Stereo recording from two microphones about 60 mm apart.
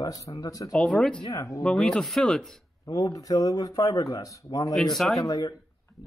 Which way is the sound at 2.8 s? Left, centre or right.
Left.